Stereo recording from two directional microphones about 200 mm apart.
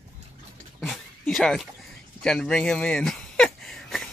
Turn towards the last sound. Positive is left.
turn(degrees=0)  # may be behind; listen again after turning